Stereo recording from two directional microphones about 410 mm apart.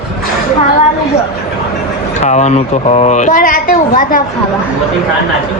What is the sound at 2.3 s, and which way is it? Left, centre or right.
A woman's voice, centre.